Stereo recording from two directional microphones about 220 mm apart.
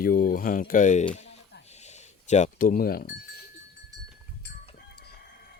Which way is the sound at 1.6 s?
30° left (ahead or behind).